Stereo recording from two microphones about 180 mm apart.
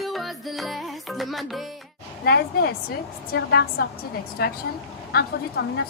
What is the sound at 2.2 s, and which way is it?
Speech, 65° left (ahead or behind).